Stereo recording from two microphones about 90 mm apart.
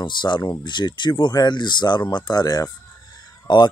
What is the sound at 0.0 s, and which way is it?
Speech, 55° left (ahead or behind).